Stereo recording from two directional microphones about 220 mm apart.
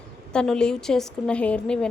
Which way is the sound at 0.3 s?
5° left (ahead or behind).